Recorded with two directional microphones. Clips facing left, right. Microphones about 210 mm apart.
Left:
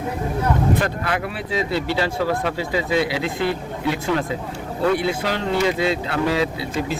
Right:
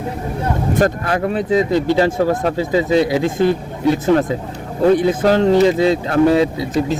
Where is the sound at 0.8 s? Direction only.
40° right (ahead or behind).